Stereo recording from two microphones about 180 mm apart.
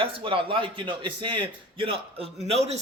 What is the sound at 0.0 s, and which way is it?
A man's voice, 30° right (ahead or behind).